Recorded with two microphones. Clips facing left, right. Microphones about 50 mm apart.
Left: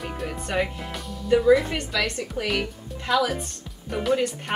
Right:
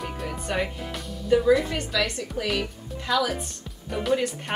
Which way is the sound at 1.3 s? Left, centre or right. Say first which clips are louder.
Left 2 dB; centre.